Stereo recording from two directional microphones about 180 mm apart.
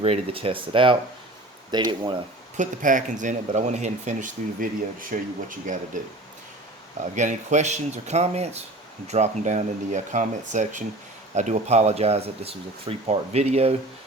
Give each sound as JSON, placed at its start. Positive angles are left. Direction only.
{"t": 0.0, "sound": "speech", "side_deg": -30}
{"t": 2.6, "sound": "speech", "side_deg": -45}
{"t": 7.2, "sound": "speech", "side_deg": -40}